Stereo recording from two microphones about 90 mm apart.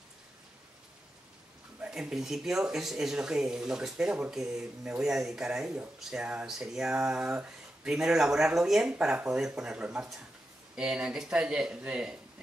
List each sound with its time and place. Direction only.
1.8 s speech: 10° right (ahead or behind)